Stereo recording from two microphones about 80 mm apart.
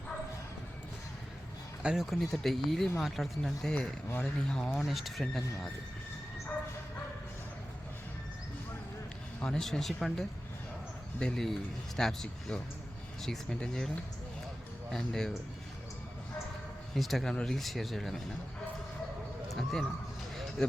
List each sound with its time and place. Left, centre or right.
1.8 s speech: centre
2.0 s speech: centre
9.4 s speech: centre
16.9 s speech: centre
19.5 s a sound: centre